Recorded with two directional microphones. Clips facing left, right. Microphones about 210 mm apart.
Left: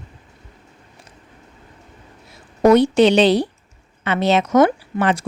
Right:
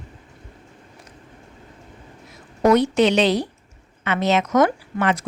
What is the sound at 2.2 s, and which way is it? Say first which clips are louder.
Speech: left 4 dB; 30° left (ahead or behind).